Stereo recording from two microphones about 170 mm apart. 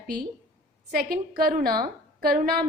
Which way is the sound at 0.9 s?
65° right (ahead or behind).